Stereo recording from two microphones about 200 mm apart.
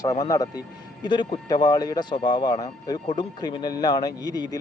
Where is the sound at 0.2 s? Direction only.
20° left (ahead or behind).